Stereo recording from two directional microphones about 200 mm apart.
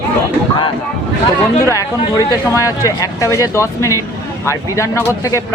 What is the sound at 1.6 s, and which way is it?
Speech, 15° left (ahead or behind).